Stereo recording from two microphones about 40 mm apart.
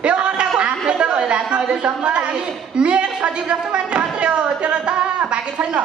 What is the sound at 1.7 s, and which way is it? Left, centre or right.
A man's voice, right.